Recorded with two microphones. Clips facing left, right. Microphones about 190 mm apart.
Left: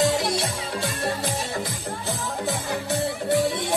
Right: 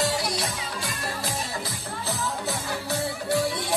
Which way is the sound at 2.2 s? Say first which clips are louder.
Left 2 dB; 20° left (ahead or behind).